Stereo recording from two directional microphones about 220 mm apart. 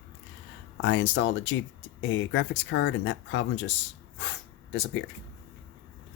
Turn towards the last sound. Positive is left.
turn(degrees=55)  # may be behind; listen again after turning